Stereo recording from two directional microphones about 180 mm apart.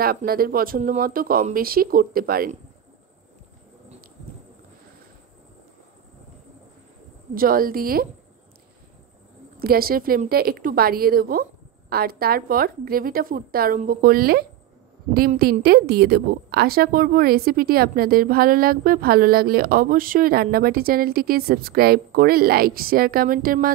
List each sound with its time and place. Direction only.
0.0 s a woman's voice: 55° right (ahead or behind)
7.3 s speech: 55° right (ahead or behind)
9.6 s a woman's voice: 55° right (ahead or behind)